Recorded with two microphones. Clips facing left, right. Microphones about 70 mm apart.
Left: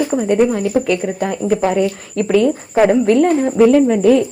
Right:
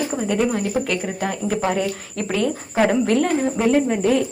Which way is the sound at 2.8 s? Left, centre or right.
Left.